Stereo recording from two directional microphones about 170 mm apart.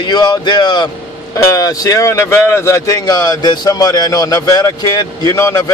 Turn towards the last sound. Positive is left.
turn(degrees=20)  # may be behind; listen again after turning